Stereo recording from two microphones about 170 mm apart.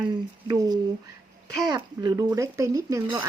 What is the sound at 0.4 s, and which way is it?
Speech, 25° right (ahead or behind).